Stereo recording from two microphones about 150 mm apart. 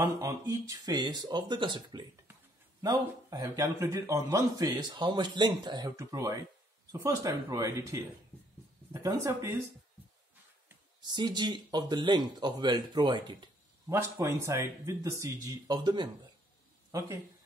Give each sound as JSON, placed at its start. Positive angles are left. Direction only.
{"t": 0.0, "sound": "a man's voice", "side_deg": -20}
{"t": 11.0, "sound": "a man's voice", "side_deg": -30}
{"t": 13.8, "sound": "a man's voice", "side_deg": -20}